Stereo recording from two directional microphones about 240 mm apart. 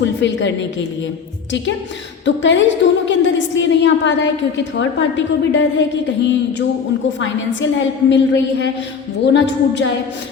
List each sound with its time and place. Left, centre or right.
0.0 s a woman's voice: left
2.2 s a woman's voice: left
8.1 s a woman's voice: left